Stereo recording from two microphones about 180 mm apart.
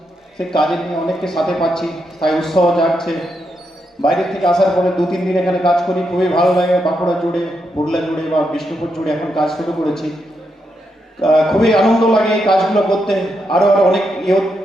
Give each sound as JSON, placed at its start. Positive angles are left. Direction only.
{"t": 0.3, "sound": "a man's voice", "side_deg": 0}
{"t": 11.2, "sound": "a man's voice", "side_deg": 0}